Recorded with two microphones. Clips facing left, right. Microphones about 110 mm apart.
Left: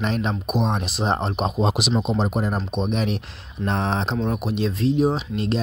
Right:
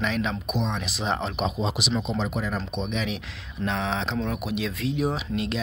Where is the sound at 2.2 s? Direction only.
45° left (ahead or behind).